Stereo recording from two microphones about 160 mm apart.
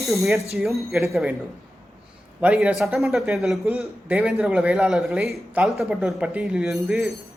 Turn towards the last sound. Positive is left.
turn(degrees=-5)  # may be behind; listen again after turning